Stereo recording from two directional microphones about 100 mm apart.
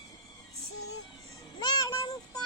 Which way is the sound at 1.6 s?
40° left (ahead or behind).